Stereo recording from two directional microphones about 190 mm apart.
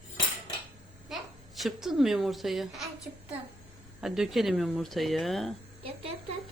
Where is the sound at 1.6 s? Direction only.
Centre (ahead or behind).